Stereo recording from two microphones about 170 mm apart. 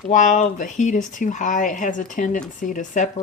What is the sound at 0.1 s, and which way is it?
Speech, 45° left (ahead or behind).